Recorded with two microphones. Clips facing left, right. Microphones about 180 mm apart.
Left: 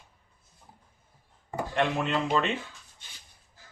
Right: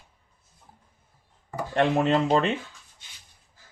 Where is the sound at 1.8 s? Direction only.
40° right (ahead or behind).